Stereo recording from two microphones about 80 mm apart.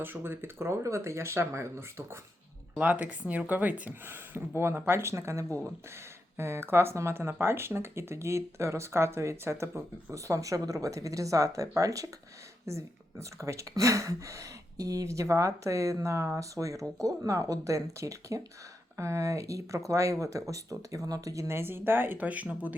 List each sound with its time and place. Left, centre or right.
0.0 s speech: right
2.7 s speech: centre